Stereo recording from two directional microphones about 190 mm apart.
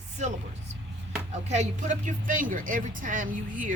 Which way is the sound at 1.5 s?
40° right (ahead or behind).